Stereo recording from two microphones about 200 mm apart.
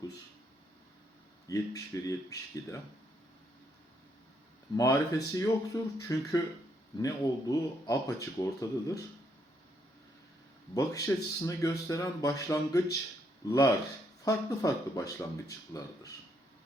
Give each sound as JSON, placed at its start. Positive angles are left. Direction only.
{"t": 1.5, "sound": "speech", "side_deg": 15}
{"t": 4.8, "sound": "speech", "side_deg": 15}
{"t": 10.8, "sound": "speech", "side_deg": 15}